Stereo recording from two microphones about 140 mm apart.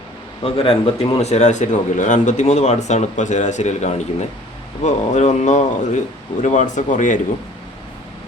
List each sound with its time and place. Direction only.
0.4 s speech: 40° left (ahead or behind); by 7.2 s 65° left (ahead or behind)